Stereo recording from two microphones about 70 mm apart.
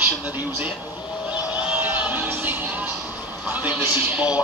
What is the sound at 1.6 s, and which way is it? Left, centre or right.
Music, right.